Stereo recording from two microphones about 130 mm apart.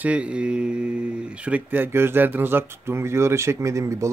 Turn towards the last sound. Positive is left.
turn(degrees=-25)  # may be behind; listen again after turning